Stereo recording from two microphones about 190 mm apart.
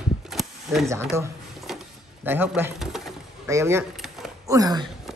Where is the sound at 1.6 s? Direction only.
5° right (ahead or behind).